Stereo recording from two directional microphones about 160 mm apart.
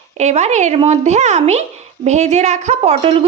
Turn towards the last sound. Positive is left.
turn(degrees=-40)  # may be behind; listen again after turning